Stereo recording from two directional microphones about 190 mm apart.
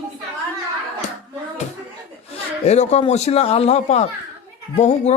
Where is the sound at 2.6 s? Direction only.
35° left (ahead or behind).